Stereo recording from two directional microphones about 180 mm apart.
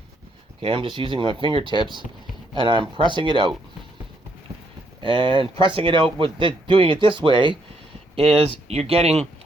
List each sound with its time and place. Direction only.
0.6 s speech: 30° right (ahead or behind)
3.0 s speech: 25° right (ahead or behind)
5.0 s speech: 25° right (ahead or behind)